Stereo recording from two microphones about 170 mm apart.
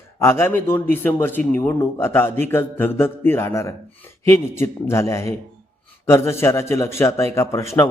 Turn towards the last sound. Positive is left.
turn(degrees=15)  # may be behind; listen again after turning